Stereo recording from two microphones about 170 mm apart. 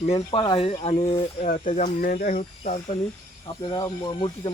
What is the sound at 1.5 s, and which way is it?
Speech, 50° left (ahead or behind).